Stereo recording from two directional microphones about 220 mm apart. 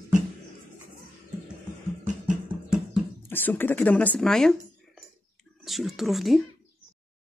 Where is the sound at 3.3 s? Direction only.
10° left (ahead or behind).